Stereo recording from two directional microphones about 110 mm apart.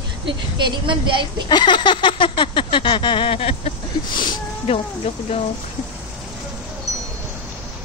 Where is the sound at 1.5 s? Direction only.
45° left (ahead or behind); by 5.4 s 70° left (ahead or behind).